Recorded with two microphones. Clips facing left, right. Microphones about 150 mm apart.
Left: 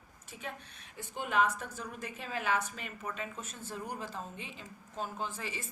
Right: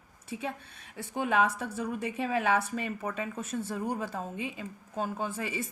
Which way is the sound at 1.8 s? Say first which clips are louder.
Right 10 dB; 65° right (ahead or behind).